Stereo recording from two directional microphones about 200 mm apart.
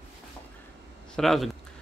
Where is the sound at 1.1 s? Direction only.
Centre (ahead or behind).